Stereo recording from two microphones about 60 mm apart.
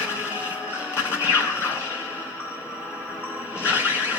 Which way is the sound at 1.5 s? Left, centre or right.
Left.